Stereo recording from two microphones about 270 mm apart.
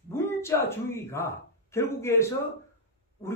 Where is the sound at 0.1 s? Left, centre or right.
Centre.